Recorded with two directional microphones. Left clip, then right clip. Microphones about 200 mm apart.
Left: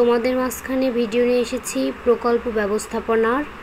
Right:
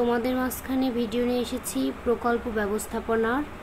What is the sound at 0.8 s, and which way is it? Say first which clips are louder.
Speech: left 9 dB; 25° right (ahead or behind).